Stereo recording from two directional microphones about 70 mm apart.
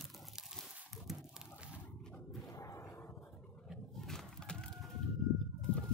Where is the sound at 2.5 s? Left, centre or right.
Left.